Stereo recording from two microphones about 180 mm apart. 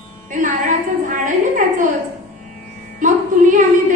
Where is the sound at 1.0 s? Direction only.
45° right (ahead or behind).